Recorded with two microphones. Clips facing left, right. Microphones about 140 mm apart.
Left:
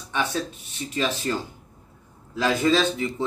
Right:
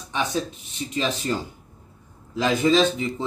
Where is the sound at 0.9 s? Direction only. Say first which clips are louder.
Even; 15° right (ahead or behind).